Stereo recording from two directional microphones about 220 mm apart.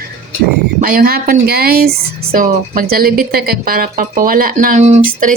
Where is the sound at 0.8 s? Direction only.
40° right (ahead or behind).